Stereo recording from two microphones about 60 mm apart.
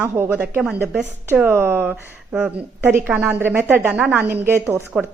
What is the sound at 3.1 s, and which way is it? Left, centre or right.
Speech, right.